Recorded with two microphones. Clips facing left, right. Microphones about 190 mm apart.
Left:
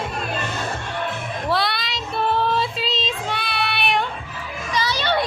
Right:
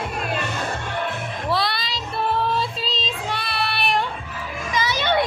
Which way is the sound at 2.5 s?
Centre (ahead or behind).